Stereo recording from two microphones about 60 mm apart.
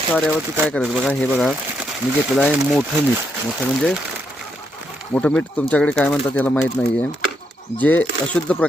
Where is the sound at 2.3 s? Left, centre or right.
Centre.